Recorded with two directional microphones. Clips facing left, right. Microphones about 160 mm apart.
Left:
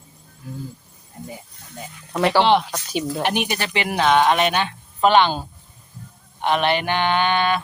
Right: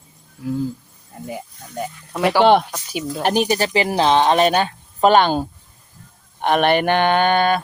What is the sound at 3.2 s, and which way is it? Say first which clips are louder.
A woman's voice: right 5 dB; 35° right (ahead or behind).